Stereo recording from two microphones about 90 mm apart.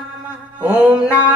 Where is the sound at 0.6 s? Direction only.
15° right (ahead or behind).